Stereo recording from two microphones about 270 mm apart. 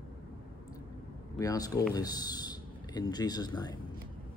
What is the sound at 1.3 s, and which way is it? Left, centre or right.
Speech, centre.